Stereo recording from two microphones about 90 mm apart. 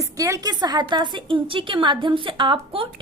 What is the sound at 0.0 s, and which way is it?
A woman's voice, 40° right (ahead or behind).